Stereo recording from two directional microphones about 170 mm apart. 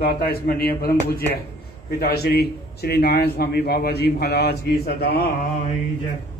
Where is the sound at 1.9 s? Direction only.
60° left (ahead or behind).